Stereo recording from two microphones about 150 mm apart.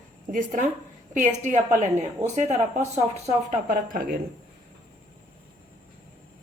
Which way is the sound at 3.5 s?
65° right (ahead or behind).